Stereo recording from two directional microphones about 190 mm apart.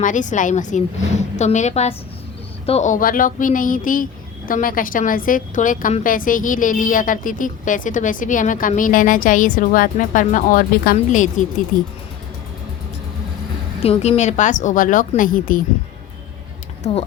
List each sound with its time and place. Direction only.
0.0 s a woman's voice: 40° left (ahead or behind)
13.8 s a woman's voice: 30° left (ahead or behind); by 15.6 s 45° left (ahead or behind)
16.8 s a woman's voice: 35° left (ahead or behind)